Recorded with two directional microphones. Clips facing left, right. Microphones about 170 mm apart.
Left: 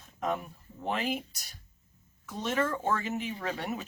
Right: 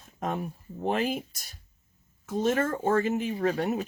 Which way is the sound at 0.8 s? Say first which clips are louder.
Right 4 dB; 45° right (ahead or behind).